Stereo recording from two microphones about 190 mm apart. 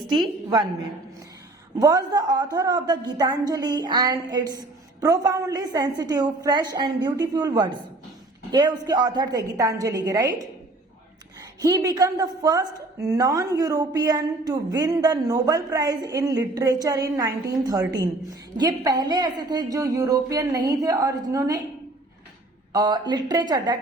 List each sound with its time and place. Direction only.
1.8 s a woman's voice: 20° right (ahead or behind)
11.6 s a woman's voice: 20° right (ahead or behind)
22.7 s a woman's voice: 20° right (ahead or behind)